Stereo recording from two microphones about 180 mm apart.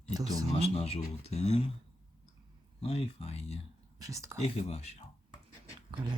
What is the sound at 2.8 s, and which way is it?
Speech, 35° left (ahead or behind).